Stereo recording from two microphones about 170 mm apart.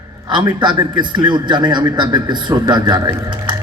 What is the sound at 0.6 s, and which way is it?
A man's voice, 25° right (ahead or behind).